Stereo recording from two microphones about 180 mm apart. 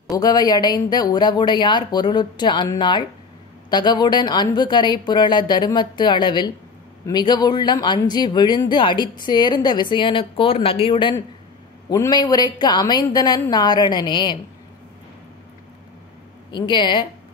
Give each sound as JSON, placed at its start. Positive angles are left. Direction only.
{"t": 0.1, "sound": "speech", "side_deg": 20}
{"t": 16.4, "sound": "speech", "side_deg": 25}